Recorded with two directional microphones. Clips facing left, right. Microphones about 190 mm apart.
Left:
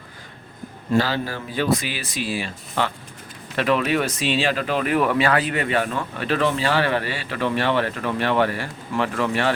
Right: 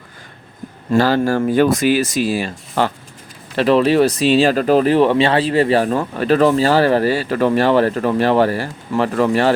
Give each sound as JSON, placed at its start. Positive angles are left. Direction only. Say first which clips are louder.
{"t": 0.9, "sound": "speech", "louder": "right 8 dB", "side_deg": -45}